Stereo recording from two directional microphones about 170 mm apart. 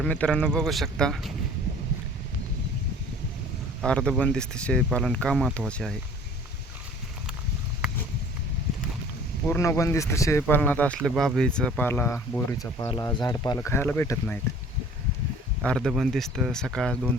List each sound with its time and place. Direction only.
0.0 s speech: 5° left (ahead or behind)
3.8 s speech: 5° left (ahead or behind)
9.5 s speech: 15° left (ahead or behind)
13.6 s speech: 10° left (ahead or behind)
15.6 s speech: 5° left (ahead or behind)